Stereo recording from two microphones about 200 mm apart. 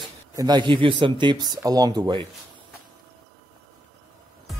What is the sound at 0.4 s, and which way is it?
Speech, 20° right (ahead or behind).